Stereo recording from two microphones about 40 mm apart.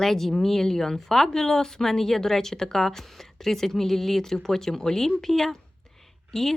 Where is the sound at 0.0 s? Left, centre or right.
Centre.